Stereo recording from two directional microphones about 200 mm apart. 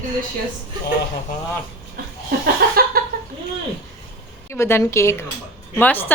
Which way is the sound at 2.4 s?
50° right (ahead or behind).